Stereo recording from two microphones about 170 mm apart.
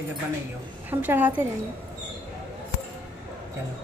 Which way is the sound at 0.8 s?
10° right (ahead or behind).